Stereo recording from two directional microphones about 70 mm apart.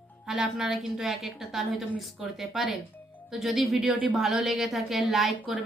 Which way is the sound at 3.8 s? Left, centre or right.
Centre.